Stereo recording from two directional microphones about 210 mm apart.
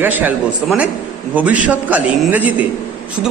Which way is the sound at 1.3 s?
5° right (ahead or behind).